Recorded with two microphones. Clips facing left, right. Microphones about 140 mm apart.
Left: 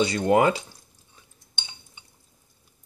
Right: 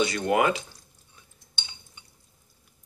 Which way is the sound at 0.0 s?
30° left (ahead or behind).